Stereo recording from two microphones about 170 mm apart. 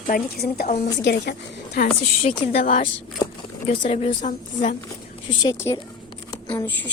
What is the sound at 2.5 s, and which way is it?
Speech, 55° left (ahead or behind).